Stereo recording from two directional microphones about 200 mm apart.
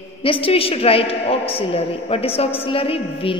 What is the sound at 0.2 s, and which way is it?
A woman's voice, 25° left (ahead or behind).